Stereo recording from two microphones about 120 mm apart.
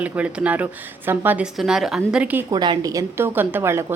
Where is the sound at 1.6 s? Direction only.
5° right (ahead or behind).